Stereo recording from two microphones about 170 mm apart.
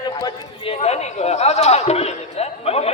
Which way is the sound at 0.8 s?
40° left (ahead or behind).